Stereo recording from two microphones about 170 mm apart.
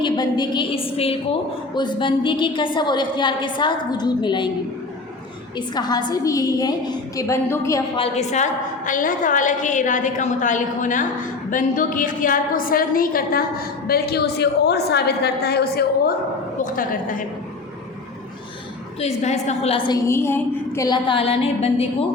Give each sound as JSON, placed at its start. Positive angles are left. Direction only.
{"t": 0.0, "sound": "a woman's voice", "side_deg": 25}
{"t": 5.5, "sound": "a woman's voice", "side_deg": 25}
{"t": 7.9, "sound": "a woman's voice", "side_deg": 35}
{"t": 16.6, "sound": "a woman's voice", "side_deg": 50}
{"t": 18.9, "sound": "a woman's voice", "side_deg": 40}
{"t": 19.9, "sound": "a woman's voice", "side_deg": 15}